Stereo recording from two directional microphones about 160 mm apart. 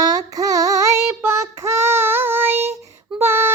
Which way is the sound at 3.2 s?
15° right (ahead or behind).